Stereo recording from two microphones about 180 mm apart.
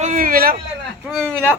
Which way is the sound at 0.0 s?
45° right (ahead or behind).